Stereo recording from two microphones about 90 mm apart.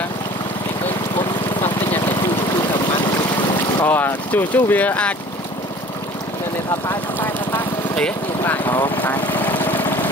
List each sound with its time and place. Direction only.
3.8 s speech: 25° left (ahead or behind)
6.9 s vehicle: 20° left (ahead or behind)